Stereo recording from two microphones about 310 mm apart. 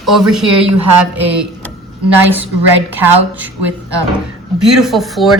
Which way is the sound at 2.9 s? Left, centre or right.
Centre.